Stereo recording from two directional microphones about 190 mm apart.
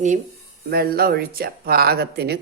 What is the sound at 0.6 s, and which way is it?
Speech, 55° right (ahead or behind).